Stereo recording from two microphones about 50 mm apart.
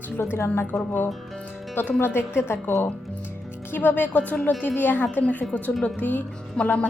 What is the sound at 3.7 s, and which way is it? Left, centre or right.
A woman's voice, left.